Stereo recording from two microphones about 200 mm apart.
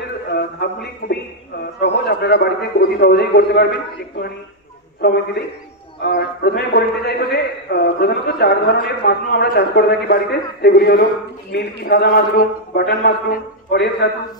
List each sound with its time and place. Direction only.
1.0 s a man's voice: 50° left (ahead or behind)
5.0 s a man's voice: 55° left (ahead or behind)